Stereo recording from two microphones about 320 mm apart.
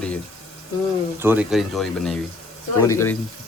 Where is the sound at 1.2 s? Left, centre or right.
Centre.